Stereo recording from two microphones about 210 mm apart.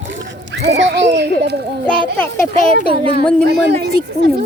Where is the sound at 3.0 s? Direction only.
25° right (ahead or behind).